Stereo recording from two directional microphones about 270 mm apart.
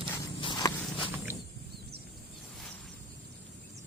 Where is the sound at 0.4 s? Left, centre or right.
Centre.